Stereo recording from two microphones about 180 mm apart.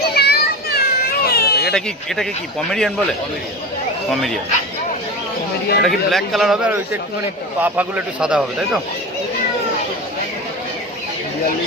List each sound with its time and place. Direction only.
0.0 s children playing: 60° left (ahead or behind)
1.7 s speech: centre (ahead or behind)
5.8 s speech: centre (ahead or behind)